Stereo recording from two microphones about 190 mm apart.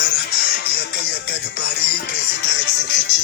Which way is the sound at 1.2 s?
60° left (ahead or behind).